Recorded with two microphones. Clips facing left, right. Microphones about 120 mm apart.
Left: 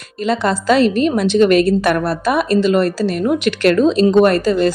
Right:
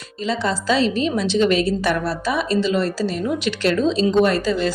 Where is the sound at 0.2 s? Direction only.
60° left (ahead or behind).